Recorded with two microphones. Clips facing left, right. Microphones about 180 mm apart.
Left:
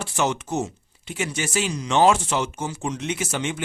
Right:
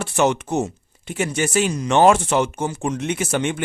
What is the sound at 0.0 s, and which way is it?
Speech, 60° right (ahead or behind).